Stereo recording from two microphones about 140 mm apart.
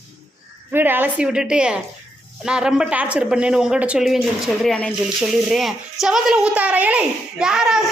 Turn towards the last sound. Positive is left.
turn(degrees=-5)  # may be behind; listen again after turning